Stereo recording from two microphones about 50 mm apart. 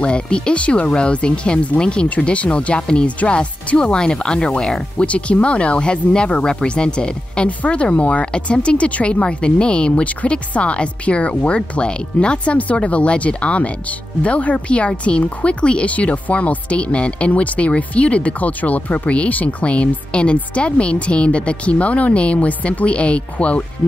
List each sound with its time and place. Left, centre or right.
0.0 s speech: left